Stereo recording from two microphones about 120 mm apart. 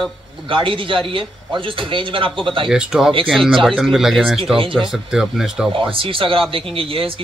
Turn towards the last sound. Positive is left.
turn(degrees=-50)  # may be behind; listen again after turning